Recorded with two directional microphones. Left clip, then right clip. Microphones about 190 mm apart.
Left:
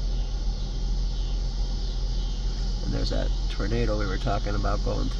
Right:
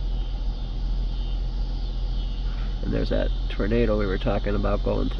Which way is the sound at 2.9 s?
15° right (ahead or behind).